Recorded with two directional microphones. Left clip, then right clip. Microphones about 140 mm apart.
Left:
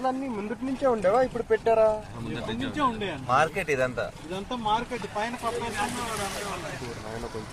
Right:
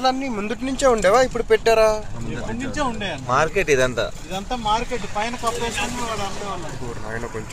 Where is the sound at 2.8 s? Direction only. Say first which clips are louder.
Right 2 dB; 60° right (ahead or behind).